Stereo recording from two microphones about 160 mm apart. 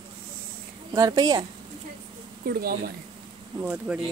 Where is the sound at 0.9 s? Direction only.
25° right (ahead or behind).